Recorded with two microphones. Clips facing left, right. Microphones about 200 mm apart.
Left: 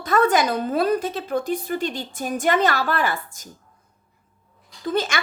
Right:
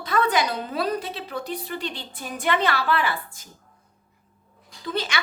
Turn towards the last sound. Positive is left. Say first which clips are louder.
# left 5 dB
turn(degrees=45)  # may be behind; listen again after turning